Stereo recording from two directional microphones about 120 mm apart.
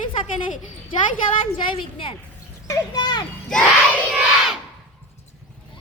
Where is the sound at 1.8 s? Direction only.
45° left (ahead or behind).